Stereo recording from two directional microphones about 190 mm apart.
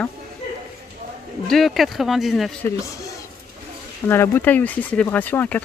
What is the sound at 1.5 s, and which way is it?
Speech, centre (ahead or behind).